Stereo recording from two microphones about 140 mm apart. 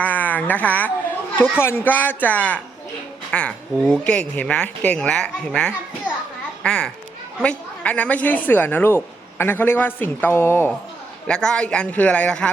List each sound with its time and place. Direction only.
0.0 s a woman's voice: 10° left (ahead or behind)
11.3 s a woman's voice: 5° left (ahead or behind)